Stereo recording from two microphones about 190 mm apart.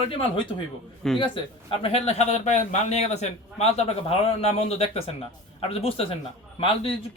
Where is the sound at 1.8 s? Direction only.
30° left (ahead or behind).